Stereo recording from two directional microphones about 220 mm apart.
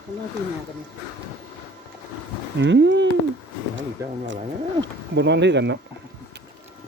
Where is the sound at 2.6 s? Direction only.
55° right (ahead or behind).